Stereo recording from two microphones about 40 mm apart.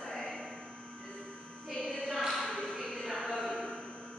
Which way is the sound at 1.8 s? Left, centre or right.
Centre.